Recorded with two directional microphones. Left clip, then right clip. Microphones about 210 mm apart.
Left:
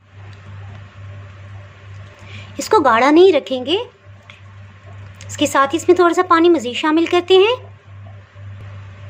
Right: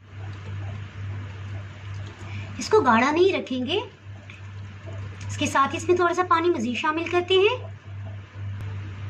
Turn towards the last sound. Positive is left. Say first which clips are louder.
# left 8 dB
turn(degrees=50)  # may be behind; listen again after turning